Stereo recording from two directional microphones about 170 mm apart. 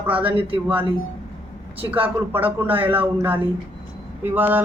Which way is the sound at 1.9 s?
10° right (ahead or behind).